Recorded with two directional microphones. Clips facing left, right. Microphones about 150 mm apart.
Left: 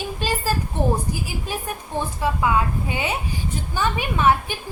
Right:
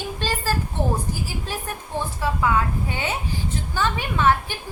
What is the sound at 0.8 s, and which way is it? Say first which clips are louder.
Speech: left 4 dB; 15° left (ahead or behind).